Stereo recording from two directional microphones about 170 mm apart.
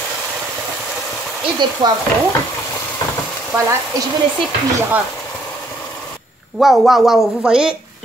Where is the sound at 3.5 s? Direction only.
15° right (ahead or behind).